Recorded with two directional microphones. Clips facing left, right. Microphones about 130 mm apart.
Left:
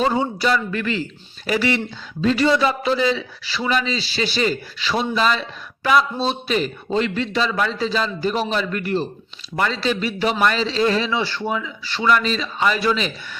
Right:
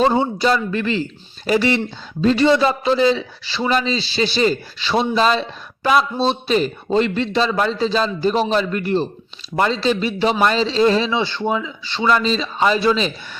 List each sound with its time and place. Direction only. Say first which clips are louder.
0.0 s a man's voice: right 3 dB; 30° right (ahead or behind)